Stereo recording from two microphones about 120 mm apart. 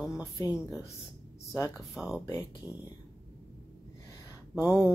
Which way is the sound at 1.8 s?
Centre (ahead or behind).